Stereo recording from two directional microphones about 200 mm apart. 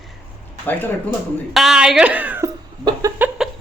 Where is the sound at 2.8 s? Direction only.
15° right (ahead or behind).